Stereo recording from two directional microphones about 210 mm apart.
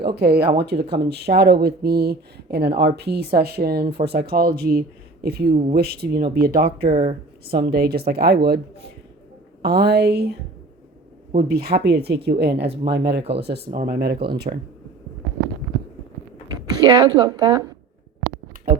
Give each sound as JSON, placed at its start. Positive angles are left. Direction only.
{"t": 0.0, "sound": "speech", "side_deg": -50}
{"t": 11.3, "sound": "speech", "side_deg": -50}
{"t": 16.5, "sound": "speech", "side_deg": -20}